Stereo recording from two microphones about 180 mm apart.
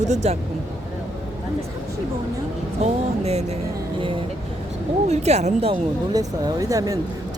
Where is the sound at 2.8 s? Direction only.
40° right (ahead or behind).